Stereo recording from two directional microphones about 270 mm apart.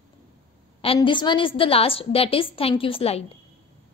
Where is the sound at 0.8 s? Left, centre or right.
Centre.